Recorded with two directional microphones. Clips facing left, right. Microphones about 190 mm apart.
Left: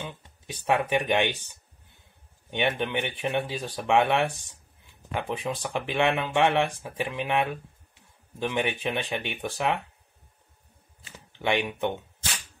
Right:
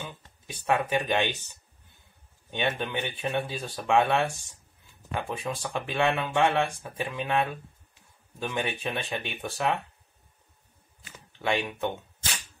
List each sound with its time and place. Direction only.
0.0 s speech: 20° left (ahead or behind)
2.5 s speech: 20° left (ahead or behind)
11.0 s speech: 25° left (ahead or behind)